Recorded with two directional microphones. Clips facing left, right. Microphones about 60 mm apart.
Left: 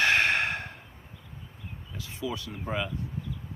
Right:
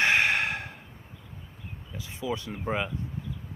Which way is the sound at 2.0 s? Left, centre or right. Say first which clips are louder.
Right 2 dB; centre.